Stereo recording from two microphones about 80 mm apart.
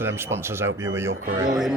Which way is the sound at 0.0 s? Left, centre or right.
Right.